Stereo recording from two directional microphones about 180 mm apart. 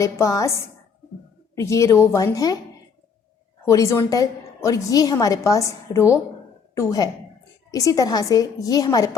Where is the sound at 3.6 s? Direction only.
20° left (ahead or behind).